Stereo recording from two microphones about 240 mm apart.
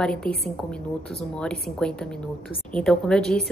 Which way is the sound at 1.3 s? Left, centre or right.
Centre.